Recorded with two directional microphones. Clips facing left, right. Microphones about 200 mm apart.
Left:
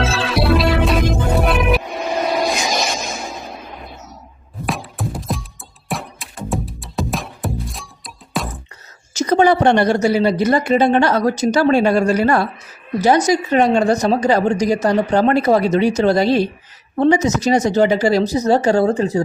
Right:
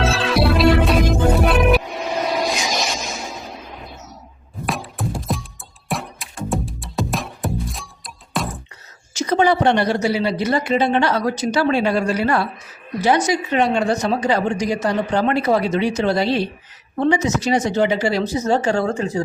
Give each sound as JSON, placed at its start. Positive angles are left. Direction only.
{"t": 0.0, "sound": "music", "side_deg": 0}
{"t": 1.9, "sound": "vehicle", "side_deg": 50}
{"t": 4.6, "sound": "music", "side_deg": 0}
{"t": 9.1, "sound": "a woman's voice", "side_deg": 45}